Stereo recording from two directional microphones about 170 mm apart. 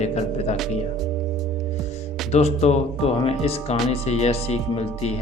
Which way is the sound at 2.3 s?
40° left (ahead or behind).